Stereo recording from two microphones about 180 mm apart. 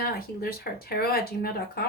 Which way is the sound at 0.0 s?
55° left (ahead or behind).